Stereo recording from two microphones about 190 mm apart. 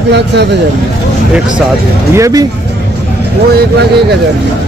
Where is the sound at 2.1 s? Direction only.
15° right (ahead or behind).